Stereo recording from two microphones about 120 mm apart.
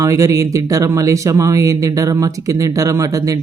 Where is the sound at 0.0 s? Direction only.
25° right (ahead or behind).